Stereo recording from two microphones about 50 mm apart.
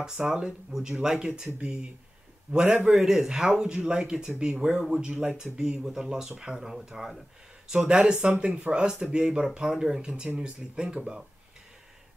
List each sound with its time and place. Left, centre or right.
0.0 s speech: centre